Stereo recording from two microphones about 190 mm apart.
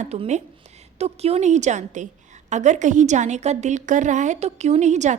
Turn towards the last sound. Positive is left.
turn(degrees=-40)  # may be behind; listen again after turning